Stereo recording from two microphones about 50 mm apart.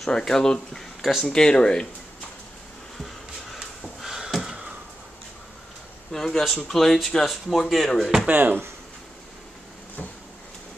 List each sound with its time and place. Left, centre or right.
0.0 s speech: centre
3.5 s a sound: centre
6.1 s speech: centre
8.3 s speech: right